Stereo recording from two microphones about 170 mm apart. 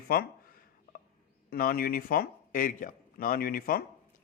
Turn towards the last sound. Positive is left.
turn(degrees=60)  # may be behind; listen again after turning